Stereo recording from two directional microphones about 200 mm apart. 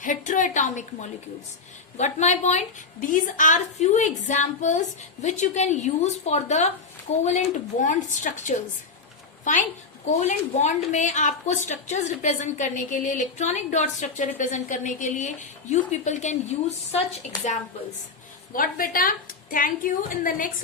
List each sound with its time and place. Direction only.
0.0 s a woman's voice: 40° left (ahead or behind)
18.5 s a woman's voice: 45° left (ahead or behind)